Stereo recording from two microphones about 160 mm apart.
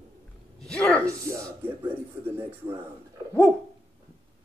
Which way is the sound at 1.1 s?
20° right (ahead or behind).